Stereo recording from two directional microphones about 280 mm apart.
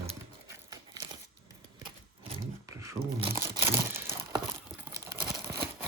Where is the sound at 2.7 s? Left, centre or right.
Centre.